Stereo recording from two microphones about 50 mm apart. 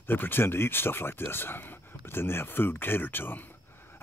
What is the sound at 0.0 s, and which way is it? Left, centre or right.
Speech, left.